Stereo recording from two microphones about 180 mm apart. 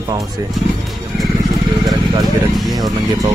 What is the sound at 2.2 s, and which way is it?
Speech, centre (ahead or behind).